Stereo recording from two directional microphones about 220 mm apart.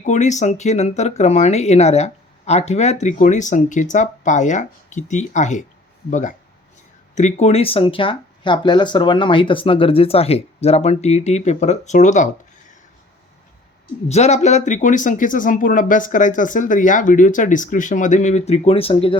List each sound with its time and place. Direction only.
0.0 s speech: 35° left (ahead or behind)
14.1 s speech: 30° left (ahead or behind)